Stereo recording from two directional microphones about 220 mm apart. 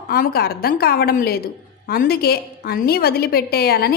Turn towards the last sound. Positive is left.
turn(degrees=45)  # may be behind; listen again after turning